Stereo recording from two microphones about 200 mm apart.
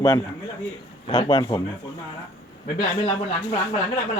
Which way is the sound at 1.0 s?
25° left (ahead or behind).